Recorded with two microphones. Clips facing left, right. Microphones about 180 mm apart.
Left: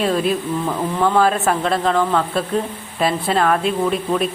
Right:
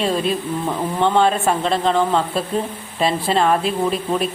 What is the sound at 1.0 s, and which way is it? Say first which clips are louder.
Speech: even; 25° right (ahead or behind).